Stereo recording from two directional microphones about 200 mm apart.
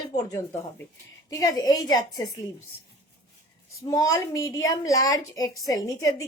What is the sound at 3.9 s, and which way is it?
A woman's voice, 15° left (ahead or behind).